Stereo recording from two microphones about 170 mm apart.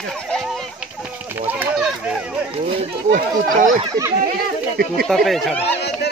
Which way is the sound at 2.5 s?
35° right (ahead or behind).